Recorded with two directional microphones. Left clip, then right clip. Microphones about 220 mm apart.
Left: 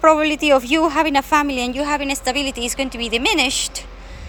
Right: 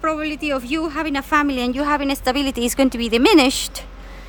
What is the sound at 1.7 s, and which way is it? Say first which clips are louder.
Speech: right 1 dB; 10° right (ahead or behind).